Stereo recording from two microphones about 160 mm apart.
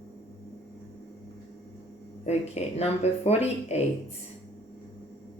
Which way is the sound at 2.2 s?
40° left (ahead or behind).